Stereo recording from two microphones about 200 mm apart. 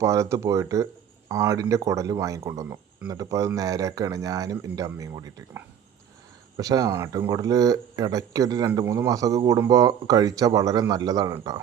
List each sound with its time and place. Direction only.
0.0 s speech: 15° right (ahead or behind)